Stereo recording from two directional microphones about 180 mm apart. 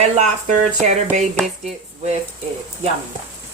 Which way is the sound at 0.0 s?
40° right (ahead or behind).